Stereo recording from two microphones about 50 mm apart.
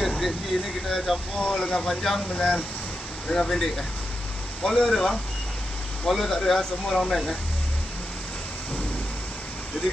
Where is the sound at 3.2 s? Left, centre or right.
Centre.